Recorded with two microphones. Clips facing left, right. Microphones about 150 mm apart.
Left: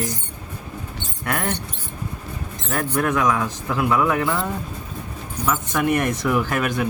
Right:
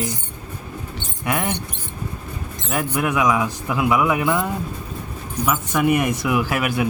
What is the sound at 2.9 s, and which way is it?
A man's voice, 10° right (ahead or behind).